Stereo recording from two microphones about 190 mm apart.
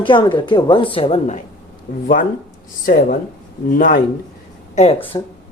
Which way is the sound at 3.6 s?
45° left (ahead or behind).